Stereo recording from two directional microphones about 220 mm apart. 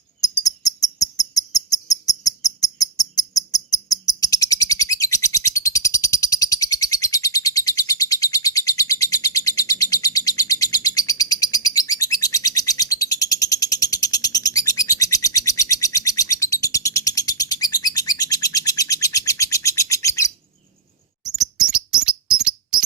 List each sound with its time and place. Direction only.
0.2 s cricket: 15° left (ahead or behind)
4.4 s bird: 15° left (ahead or behind)
21.6 s bird: 5° right (ahead or behind)